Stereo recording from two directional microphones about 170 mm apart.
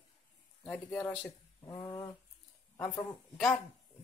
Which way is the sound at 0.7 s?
10° left (ahead or behind).